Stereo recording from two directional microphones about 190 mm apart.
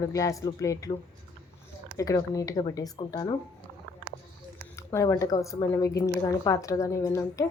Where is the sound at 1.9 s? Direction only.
20° left (ahead or behind).